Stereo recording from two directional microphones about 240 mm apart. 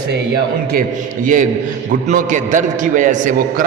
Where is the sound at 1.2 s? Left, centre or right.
Right.